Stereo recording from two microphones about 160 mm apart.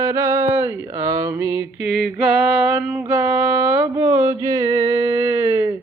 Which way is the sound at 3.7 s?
20° right (ahead or behind).